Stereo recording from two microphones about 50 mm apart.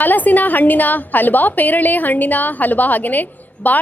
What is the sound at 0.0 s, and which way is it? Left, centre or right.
A woman's voice, left.